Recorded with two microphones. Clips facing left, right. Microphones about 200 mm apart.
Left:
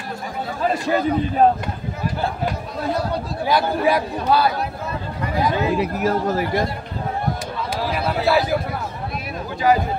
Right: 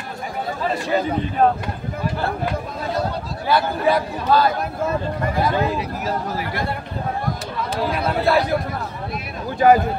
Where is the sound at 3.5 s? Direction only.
10° left (ahead or behind).